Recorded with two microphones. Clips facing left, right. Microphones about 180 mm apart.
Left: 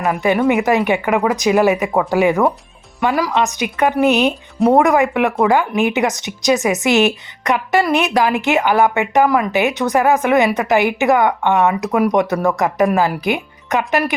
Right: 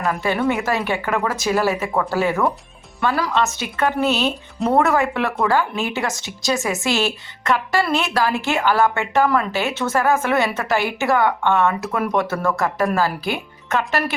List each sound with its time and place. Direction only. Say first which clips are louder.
0.0 s speech: left 5 dB; 15° left (ahead or behind)